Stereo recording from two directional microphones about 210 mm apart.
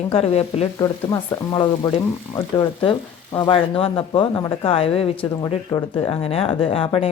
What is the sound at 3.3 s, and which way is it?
Speech, 25° left (ahead or behind).